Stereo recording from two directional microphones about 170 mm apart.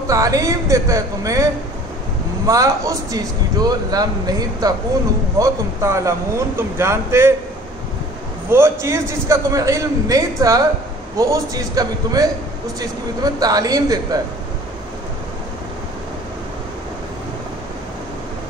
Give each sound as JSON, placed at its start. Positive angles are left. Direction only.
{"t": 0.1, "sound": "a man's voice", "side_deg": -20}
{"t": 8.5, "sound": "a man's voice", "side_deg": -15}